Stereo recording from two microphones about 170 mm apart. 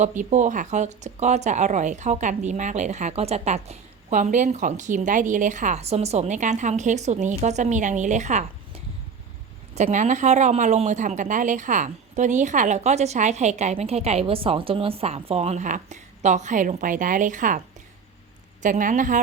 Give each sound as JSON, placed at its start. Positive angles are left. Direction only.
{"t": 0.0, "sound": "speech", "side_deg": -45}
{"t": 9.7, "sound": "speech", "side_deg": -45}
{"t": 18.6, "sound": "speech", "side_deg": -50}